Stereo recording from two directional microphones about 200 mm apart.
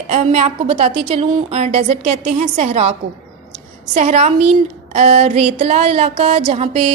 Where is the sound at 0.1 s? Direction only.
30° right (ahead or behind).